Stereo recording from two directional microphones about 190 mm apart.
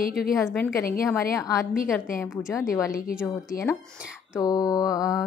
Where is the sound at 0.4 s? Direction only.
Centre (ahead or behind).